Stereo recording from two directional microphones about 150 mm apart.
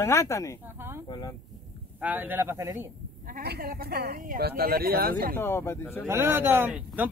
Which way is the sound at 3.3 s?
80° right.